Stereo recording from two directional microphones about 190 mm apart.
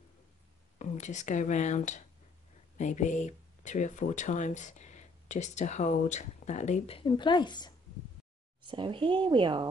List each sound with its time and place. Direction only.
0.7 s speech: 40° left (ahead or behind); by 7.7 s 25° left (ahead or behind)
8.6 s a woman's voice: 25° right (ahead or behind)